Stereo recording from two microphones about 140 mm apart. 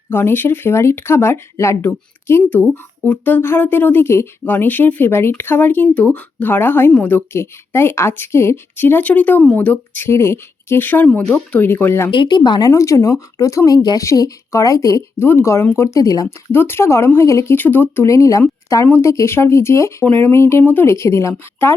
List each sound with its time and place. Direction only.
0.1 s speech: 15° left (ahead or behind)
12.1 s speech: 35° left (ahead or behind); by 21.8 s 15° left (ahead or behind)